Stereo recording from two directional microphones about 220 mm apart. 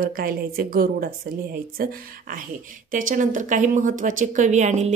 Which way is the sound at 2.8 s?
35° right (ahead or behind).